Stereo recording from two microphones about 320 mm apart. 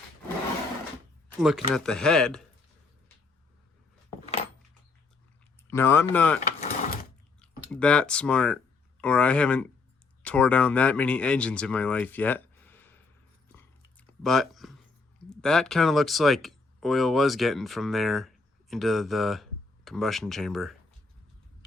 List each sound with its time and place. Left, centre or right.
1.4 s speech: centre
5.7 s speech: centre
6.4 s mechanisms: left
7.4 s speech: centre
14.1 s a sound: centre
15.3 s speech: centre